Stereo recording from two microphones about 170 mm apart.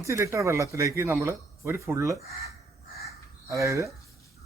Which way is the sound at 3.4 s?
20° right (ahead or behind).